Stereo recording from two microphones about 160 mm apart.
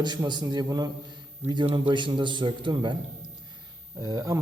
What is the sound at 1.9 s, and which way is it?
A man's voice, 30° right (ahead or behind).